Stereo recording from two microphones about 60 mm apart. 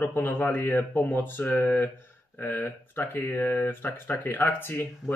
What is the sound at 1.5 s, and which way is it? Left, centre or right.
Speech, left.